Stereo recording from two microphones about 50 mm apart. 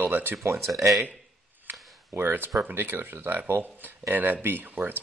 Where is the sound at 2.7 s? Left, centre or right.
Right.